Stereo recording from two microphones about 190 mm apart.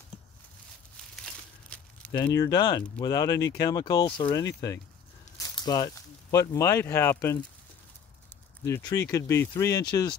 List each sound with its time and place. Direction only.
1.1 s crumpling: 5° left (ahead or behind)
2.1 s speech: 20° left (ahead or behind)
8.6 s speech: 15° left (ahead or behind)